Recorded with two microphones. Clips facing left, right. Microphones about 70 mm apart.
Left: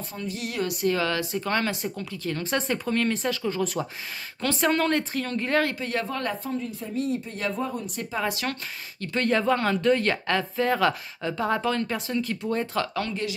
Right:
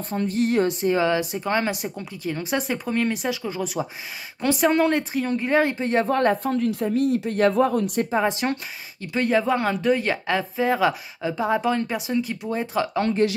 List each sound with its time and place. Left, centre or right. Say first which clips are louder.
0.1 s speech: right 12 dB; right
6.0 s speech: right 9 dB; right
6.4 s speech: right 8 dB; right
7.5 s speech: right 10 dB; right
8.2 s speech: right 3 dB; right
9.0 s speech: right 2 dB; centre
12.9 s speech: right 8 dB; right